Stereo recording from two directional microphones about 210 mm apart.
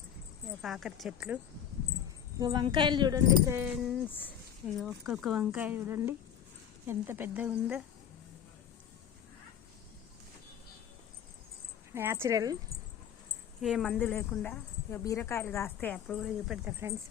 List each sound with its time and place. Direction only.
0.6 s speech: centre (ahead or behind)
2.4 s speech: 20° right (ahead or behind)
3.9 s speech: 10° left (ahead or behind)
11.9 s speech: 10° right (ahead or behind)
13.6 s speech: centre (ahead or behind)